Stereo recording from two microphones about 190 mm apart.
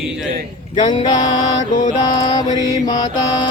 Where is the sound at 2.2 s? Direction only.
25° left (ahead or behind).